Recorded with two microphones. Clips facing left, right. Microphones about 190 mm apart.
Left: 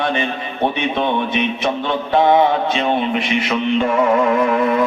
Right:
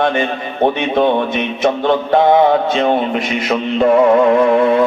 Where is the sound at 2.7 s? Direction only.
45° right (ahead or behind).